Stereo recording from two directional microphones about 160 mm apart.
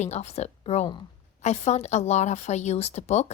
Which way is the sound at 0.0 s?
45° left (ahead or behind).